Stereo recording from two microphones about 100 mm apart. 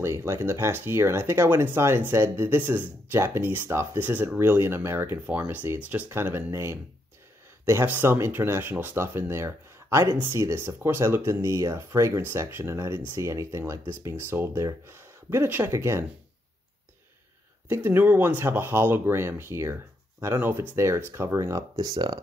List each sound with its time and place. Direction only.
0.0 s speech: 30° right (ahead or behind)
17.6 s speech: 25° right (ahead or behind); by 22.2 s 45° right (ahead or behind)